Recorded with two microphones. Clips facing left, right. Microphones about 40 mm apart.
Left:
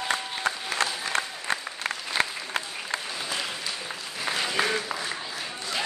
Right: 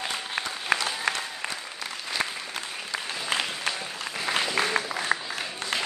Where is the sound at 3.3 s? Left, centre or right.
Right.